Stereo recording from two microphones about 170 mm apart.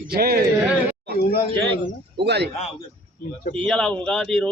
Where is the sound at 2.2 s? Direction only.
80° right.